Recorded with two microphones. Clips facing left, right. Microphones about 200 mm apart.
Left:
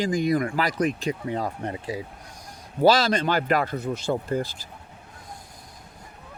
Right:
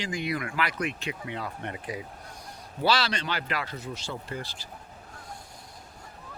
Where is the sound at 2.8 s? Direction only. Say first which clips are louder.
Left 8 dB; 45° left (ahead or behind).